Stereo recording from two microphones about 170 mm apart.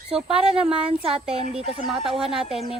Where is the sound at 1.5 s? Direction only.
35° right (ahead or behind).